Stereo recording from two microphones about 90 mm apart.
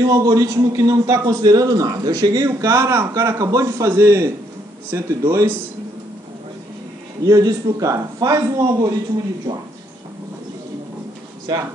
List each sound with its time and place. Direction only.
0.0 s a man's voice: 40° right (ahead or behind)
3.3 s a man's voice: 40° right (ahead or behind)
7.2 s a man's voice: 40° right (ahead or behind)
9.5 s speech: 60° right (ahead or behind)
11.5 s speech: 45° right (ahead or behind)